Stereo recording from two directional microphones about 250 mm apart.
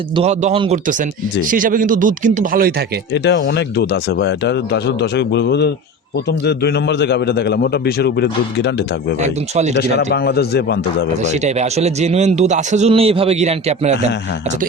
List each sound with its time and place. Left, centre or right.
0.1 s a man's voice: right
3.1 s a man's voice: left
9.2 s a man's voice: right
10.1 s a man's voice: left
11.2 s a man's voice: right